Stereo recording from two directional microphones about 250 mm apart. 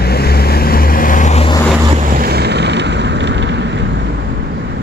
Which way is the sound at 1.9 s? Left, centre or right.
Right.